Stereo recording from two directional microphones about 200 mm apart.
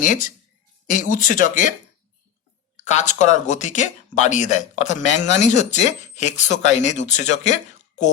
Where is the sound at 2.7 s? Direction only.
35° left (ahead or behind).